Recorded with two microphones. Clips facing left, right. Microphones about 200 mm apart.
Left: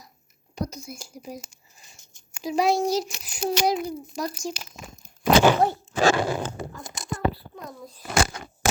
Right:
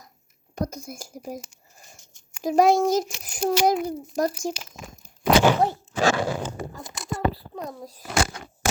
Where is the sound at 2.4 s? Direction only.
50° right (ahead or behind).